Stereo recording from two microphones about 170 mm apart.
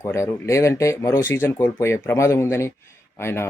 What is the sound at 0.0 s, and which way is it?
Speech, 15° left (ahead or behind).